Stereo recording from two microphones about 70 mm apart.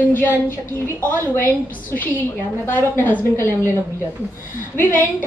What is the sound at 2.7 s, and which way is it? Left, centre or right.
Speech, left.